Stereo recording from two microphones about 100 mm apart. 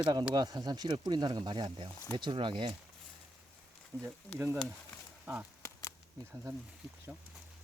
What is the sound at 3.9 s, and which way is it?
Speech, 40° right (ahead or behind).